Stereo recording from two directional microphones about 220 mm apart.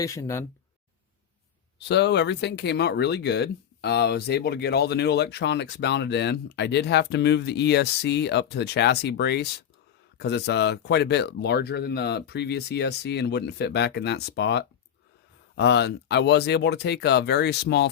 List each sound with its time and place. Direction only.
0.0 s speech: 15° left (ahead or behind)
1.9 s speech: 50° left (ahead or behind)